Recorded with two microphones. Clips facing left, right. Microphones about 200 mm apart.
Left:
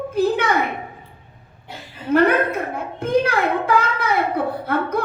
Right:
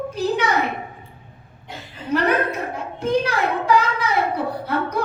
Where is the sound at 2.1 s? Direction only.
55° left (ahead or behind).